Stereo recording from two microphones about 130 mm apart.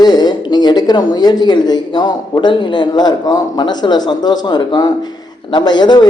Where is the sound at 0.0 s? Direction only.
30° left (ahead or behind).